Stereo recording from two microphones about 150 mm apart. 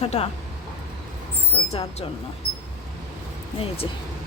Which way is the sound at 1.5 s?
40° left (ahead or behind).